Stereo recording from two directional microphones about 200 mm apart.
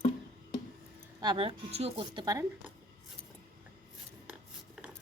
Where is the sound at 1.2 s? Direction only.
25° right (ahead or behind).